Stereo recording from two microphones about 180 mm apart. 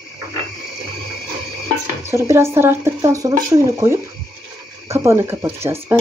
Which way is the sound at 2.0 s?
15° right (ahead or behind).